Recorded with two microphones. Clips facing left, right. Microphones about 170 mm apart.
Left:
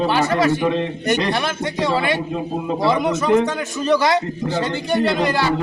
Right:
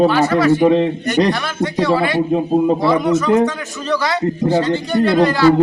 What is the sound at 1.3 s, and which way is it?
A man's voice, 20° left (ahead or behind).